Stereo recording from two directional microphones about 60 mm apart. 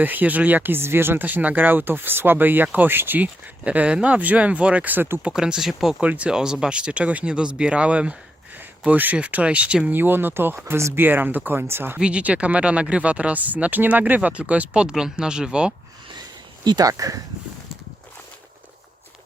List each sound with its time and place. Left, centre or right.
0.0 s speech: right
1.2 s speech: right
3.6 s speech: right
5.3 s speech: centre
6.0 s speech: right
9.9 s speech: right
10.8 s speech: right
11.0 s speech: right
11.9 s speech: centre
16.8 s speech: right